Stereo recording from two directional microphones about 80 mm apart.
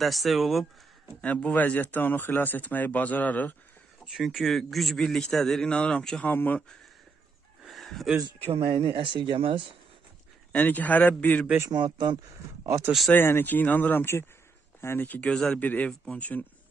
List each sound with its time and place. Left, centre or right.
0.0 s a man's voice: centre
1.2 s speech: centre
4.0 s a man's voice: centre
6.2 s speech: left
7.6 s chicken: centre
8.2 s speech: right
10.5 s speech: centre
11.7 s speech: right
12.6 s speech: right
13.1 s speech: left
15.2 s speech: centre
15.6 s speech: left